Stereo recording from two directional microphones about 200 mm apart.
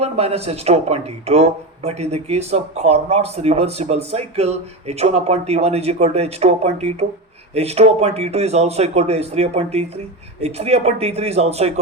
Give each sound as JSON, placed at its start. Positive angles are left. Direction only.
{"t": 0.0, "sound": "speech", "side_deg": -30}